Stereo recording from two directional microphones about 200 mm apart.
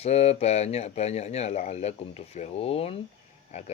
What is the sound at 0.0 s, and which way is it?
Speech, 30° left (ahead or behind).